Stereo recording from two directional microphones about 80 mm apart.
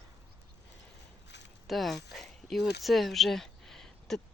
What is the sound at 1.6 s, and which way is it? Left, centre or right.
Speech, centre.